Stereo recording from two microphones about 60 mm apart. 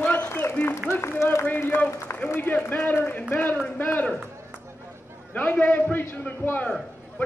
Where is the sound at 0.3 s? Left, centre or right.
Left.